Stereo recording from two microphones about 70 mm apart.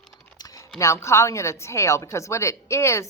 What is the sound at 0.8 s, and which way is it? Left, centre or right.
Speech, left.